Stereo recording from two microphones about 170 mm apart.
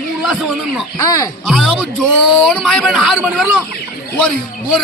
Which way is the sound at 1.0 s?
20° left (ahead or behind).